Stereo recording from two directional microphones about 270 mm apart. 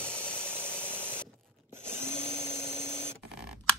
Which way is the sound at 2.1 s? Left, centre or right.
Left.